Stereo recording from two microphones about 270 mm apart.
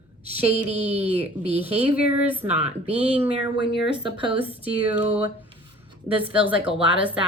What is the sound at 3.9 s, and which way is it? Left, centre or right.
Speech, centre.